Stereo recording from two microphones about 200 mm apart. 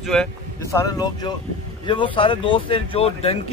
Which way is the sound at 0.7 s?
15° left (ahead or behind).